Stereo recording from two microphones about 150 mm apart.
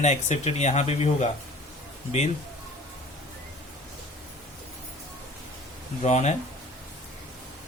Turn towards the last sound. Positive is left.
turn(degrees=50)  # may be behind; listen again after turning